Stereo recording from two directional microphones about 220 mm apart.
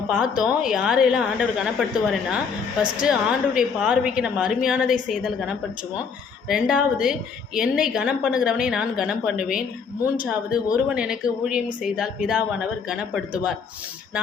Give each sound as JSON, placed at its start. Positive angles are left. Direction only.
{"t": 0.1, "sound": "speech", "side_deg": -5}
{"t": 3.0, "sound": "speech", "side_deg": -5}